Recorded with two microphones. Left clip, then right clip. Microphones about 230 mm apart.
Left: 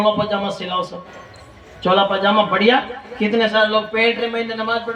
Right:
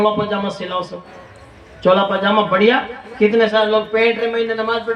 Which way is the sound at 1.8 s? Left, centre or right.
Right.